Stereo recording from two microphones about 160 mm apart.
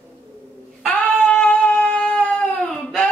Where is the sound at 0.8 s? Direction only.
5° left (ahead or behind).